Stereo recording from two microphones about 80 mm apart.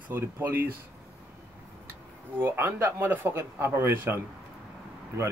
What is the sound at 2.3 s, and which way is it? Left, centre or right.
Speech, right.